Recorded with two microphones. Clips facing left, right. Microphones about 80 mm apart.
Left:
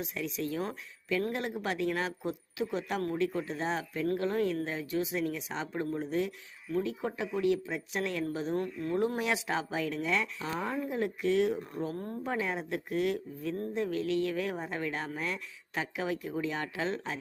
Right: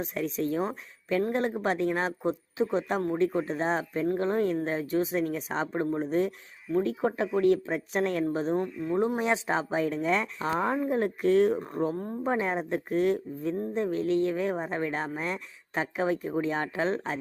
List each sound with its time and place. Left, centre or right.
0.0 s speech: right
4.0 s speech: right
4.3 s speech: right
8.5 s speech: centre; by 17.2 s right